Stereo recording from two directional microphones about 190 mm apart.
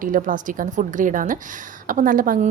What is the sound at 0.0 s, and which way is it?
A woman's voice, 45° right (ahead or behind).